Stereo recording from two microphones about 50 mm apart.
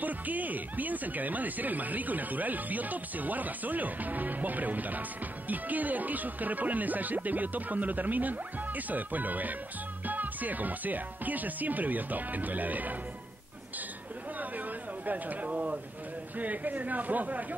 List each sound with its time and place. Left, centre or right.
0.0 s speech: right
14.4 s speech: right